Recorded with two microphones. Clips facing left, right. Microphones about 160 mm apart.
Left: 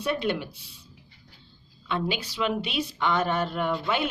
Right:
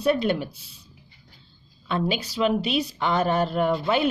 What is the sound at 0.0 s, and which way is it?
Speech, 40° right (ahead or behind).